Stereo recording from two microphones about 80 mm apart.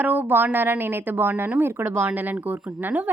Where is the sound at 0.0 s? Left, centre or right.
Right.